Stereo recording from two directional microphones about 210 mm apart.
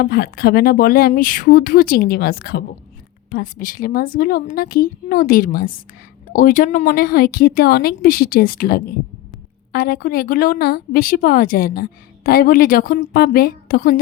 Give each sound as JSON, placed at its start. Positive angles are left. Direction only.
{"t": 0.0, "sound": "a woman's voice", "side_deg": 45}